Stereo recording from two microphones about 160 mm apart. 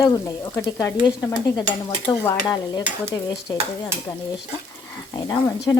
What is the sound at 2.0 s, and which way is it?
Stir, 10° left (ahead or behind).